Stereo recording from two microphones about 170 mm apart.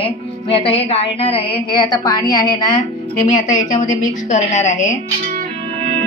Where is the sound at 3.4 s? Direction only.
45° left (ahead or behind).